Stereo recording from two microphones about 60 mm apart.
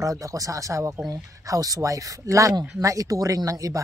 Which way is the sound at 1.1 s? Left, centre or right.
Right.